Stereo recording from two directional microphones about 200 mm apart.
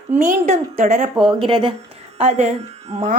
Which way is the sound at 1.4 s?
25° right (ahead or behind).